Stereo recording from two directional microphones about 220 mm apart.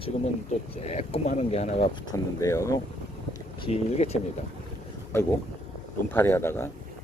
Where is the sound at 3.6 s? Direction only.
30° left (ahead or behind).